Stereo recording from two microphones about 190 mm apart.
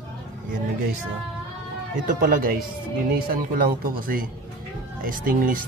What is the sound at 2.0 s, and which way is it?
Speech, 45° right (ahead or behind).